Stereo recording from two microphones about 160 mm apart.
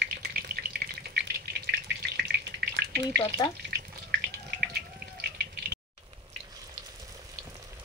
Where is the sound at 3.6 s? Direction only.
85° right.